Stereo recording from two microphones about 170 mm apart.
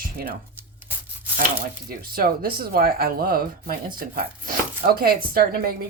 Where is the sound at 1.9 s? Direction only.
60° right (ahead or behind).